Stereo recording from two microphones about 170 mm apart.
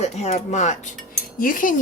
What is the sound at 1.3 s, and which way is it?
Speech, 55° left (ahead or behind).